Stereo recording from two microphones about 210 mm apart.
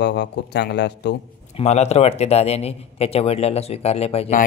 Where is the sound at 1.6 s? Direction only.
30° left (ahead or behind).